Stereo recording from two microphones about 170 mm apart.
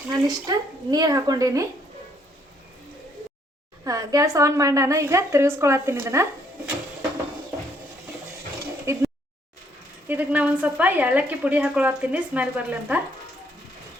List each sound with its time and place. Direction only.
0.1 s speech: 20° right (ahead or behind)
3.8 s speech: 20° right (ahead or behind)
8.9 s speech: 15° right (ahead or behind)
10.1 s speech: 10° right (ahead or behind)